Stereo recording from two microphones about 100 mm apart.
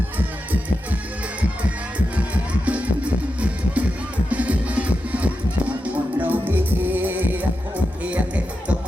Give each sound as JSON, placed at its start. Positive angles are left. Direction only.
{"t": 0.2, "sound": "music", "side_deg": -15}
{"t": 2.3, "sound": "music", "side_deg": -15}